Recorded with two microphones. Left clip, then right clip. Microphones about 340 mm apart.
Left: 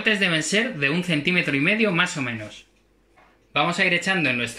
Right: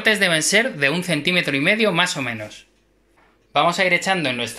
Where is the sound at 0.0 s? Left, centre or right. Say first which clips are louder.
Right 4 dB; centre.